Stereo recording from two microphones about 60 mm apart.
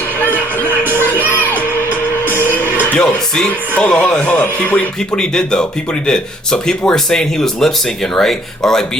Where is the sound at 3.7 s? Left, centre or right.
Left.